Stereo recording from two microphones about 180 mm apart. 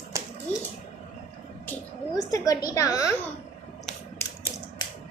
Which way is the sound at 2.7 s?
20° left (ahead or behind).